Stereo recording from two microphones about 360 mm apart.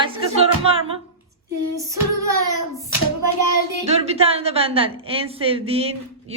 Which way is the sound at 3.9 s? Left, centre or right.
Centre.